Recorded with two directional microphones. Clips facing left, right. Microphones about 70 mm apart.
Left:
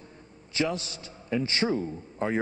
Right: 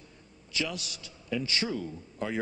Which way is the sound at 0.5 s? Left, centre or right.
Left.